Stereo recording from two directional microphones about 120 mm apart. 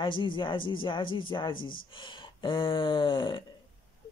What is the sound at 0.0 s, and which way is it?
Speech, 45° left (ahead or behind).